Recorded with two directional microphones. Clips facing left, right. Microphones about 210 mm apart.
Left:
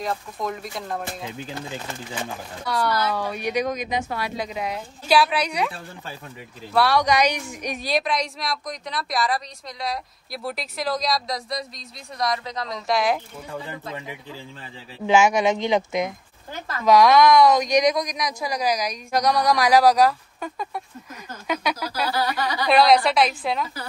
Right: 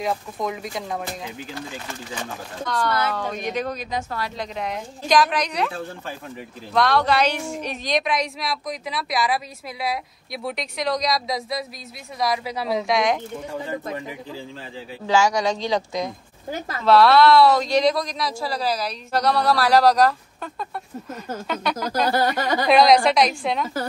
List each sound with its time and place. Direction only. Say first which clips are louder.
0.0 s a woman's voice: right 2 dB; centre (ahead or behind)
2.6 s a woman's voice: even; 10° left (ahead or behind)
15.0 s speech: left 2 dB; 20° left (ahead or behind)
22.0 s speech: right 3 dB; 45° right (ahead or behind)
22.7 s a woman's voice: right 1 dB; centre (ahead or behind)